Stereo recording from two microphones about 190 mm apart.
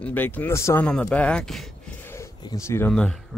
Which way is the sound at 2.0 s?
15° left (ahead or behind).